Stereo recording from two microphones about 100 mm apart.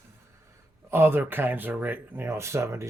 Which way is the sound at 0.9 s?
25° right (ahead or behind).